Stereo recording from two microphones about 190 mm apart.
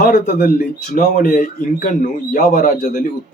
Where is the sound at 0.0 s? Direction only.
50° left (ahead or behind).